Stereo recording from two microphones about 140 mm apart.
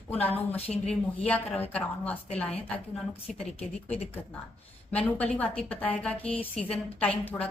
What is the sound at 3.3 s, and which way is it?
Speech, 50° left (ahead or behind).